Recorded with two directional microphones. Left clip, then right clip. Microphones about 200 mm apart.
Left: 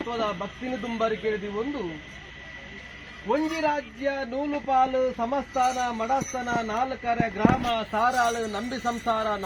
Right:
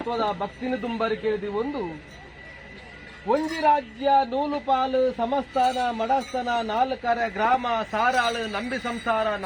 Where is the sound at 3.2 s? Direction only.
15° right (ahead or behind).